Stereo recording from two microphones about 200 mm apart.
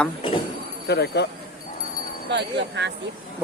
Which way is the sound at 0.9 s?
55° left (ahead or behind).